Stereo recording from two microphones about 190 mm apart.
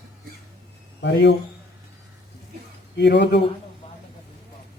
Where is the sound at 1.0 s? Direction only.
65° left (ahead or behind).